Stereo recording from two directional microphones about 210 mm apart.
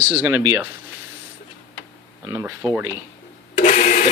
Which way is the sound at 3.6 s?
35° left (ahead or behind).